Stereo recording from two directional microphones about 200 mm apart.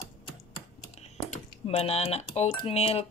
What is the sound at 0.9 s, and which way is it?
Speech, 30° left (ahead or behind).